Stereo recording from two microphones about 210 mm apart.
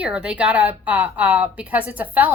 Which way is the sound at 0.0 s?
5° right (ahead or behind).